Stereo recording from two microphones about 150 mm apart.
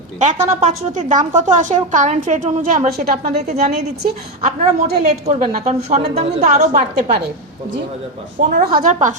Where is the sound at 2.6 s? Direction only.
65° right (ahead or behind); by 3.5 s 85° right.